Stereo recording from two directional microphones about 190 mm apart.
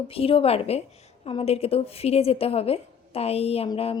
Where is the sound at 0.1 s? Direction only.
30° left (ahead or behind).